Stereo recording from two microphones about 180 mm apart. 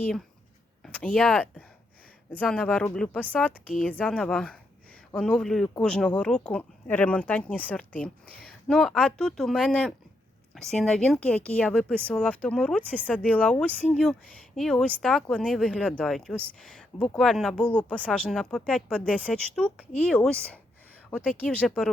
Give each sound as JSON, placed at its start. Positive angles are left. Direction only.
{"t": 0.8, "sound": "speech", "side_deg": 10}